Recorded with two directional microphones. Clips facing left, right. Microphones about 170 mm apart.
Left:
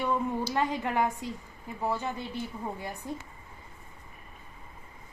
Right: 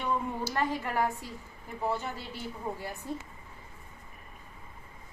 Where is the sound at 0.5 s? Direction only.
20° left (ahead or behind).